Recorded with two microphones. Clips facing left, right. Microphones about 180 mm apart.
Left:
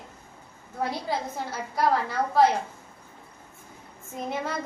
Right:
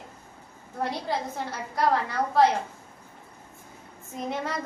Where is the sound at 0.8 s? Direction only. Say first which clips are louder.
Even; centre (ahead or behind).